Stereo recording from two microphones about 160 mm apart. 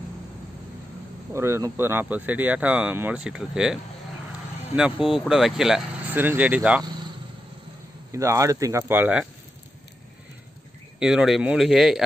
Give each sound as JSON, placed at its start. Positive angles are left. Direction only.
{"t": 1.3, "sound": "speech", "side_deg": -15}
{"t": 8.1, "sound": "speech", "side_deg": -20}
{"t": 11.0, "sound": "speech", "side_deg": -5}